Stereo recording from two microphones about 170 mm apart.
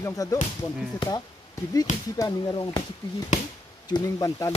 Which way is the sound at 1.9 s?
45° left (ahead or behind).